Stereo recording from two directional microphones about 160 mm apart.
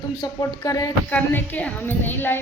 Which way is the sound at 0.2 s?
20° left (ahead or behind).